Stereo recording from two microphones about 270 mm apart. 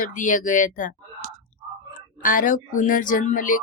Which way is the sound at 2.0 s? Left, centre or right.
Left.